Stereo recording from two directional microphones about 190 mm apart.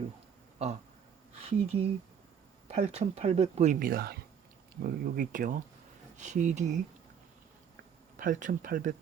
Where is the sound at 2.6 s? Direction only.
35° right (ahead or behind).